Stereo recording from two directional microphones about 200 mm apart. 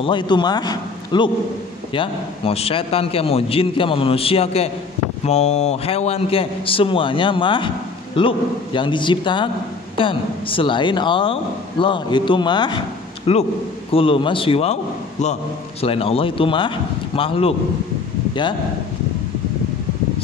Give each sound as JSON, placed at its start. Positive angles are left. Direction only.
{"t": 0.0, "sound": "a man's voice", "side_deg": 25}